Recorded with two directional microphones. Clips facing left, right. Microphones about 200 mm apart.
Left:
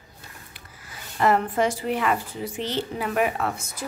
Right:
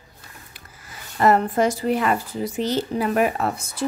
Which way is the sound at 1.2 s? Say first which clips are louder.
Right 3 dB; 40° right (ahead or behind).